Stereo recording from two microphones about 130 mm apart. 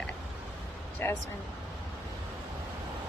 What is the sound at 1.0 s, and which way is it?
Speech, 15° left (ahead or behind).